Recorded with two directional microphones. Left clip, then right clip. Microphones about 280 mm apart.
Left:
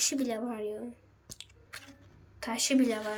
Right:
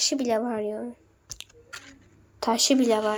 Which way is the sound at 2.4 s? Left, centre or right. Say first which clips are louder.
Right 7 dB; centre.